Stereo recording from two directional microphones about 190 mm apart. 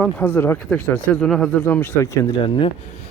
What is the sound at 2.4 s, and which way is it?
Speech, 25° left (ahead or behind).